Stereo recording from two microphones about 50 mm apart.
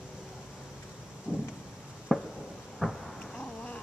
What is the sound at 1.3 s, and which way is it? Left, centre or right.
Thunder, centre.